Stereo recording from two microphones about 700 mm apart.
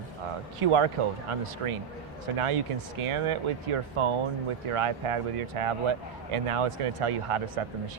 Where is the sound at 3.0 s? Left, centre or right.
Right.